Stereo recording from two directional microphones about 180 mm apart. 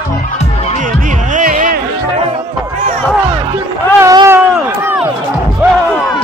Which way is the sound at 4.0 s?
20° right (ahead or behind).